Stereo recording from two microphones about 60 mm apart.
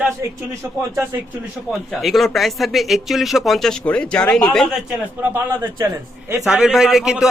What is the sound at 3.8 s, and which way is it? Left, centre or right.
Speech, centre.